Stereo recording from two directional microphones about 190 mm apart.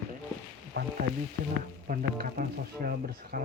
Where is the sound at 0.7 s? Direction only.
90° right.